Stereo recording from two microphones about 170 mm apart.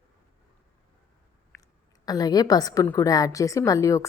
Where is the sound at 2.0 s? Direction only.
20° left (ahead or behind).